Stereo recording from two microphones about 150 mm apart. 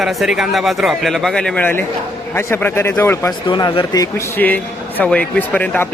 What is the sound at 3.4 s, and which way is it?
Speech, 30° left (ahead or behind).